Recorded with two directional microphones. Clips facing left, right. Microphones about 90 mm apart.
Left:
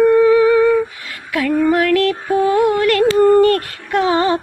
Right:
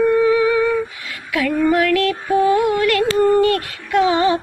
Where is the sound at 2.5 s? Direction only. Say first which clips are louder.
Left 2 dB; 40° left (ahead or behind).